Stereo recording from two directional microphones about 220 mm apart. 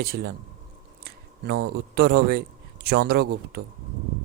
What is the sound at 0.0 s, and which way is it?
Speech, 45° right (ahead or behind).